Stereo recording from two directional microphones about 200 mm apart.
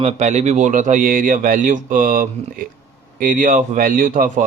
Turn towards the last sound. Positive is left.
turn(degrees=-40)  # may be behind; listen again after turning